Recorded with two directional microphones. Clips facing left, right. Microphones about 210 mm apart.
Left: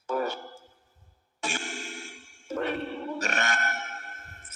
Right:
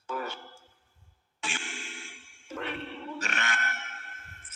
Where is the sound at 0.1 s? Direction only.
40° left (ahead or behind).